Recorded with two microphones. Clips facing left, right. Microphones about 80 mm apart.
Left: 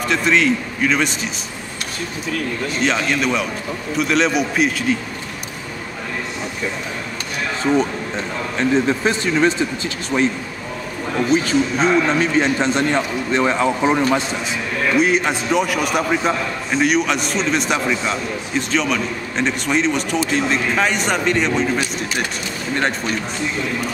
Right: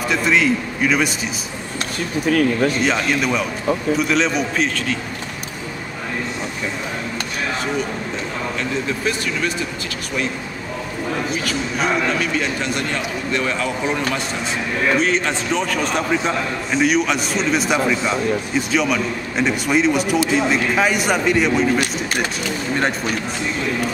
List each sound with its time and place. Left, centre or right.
0.1 s a man's voice: centre
2.2 s speech: right
2.8 s a man's voice: centre
8.5 s a man's voice: left
11.3 s a man's voice: left; by 23.1 s centre